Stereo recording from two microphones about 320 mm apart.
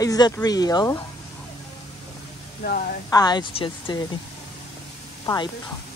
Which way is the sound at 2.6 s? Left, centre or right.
Left.